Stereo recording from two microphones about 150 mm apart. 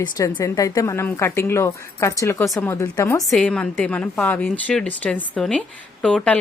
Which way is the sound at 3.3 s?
5° left (ahead or behind).